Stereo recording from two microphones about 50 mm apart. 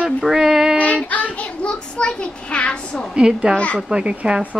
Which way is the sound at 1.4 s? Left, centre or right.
Centre.